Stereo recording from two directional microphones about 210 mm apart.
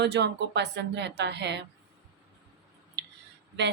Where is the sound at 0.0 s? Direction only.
55° right (ahead or behind).